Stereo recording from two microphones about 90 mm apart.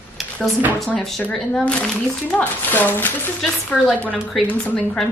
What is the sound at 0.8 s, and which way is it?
Speech, 5° left (ahead or behind).